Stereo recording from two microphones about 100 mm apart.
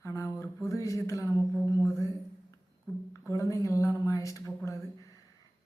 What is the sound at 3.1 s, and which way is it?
A woman's voice, 30° left (ahead or behind).